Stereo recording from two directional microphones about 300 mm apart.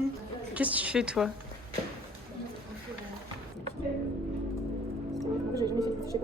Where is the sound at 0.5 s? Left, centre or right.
Centre.